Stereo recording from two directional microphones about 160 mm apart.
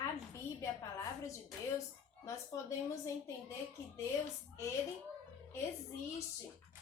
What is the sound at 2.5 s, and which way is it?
Speech, 20° left (ahead or behind).